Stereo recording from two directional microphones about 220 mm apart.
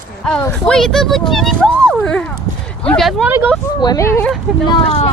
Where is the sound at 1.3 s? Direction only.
Centre (ahead or behind).